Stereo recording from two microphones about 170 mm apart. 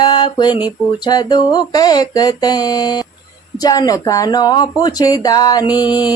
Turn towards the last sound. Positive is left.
turn(degrees=25)  # may be behind; listen again after turning